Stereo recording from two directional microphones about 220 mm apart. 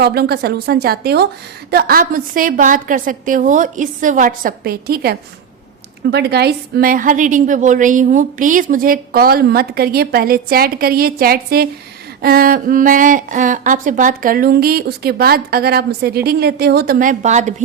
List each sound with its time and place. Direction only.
0.0 s a woman's voice: 45° right (ahead or behind)